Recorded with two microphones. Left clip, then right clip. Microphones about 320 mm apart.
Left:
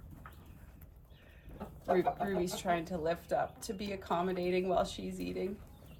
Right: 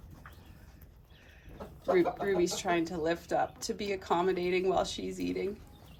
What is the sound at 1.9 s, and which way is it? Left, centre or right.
Speech, right.